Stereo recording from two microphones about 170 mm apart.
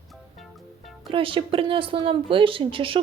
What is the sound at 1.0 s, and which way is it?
Speech, 30° right (ahead or behind).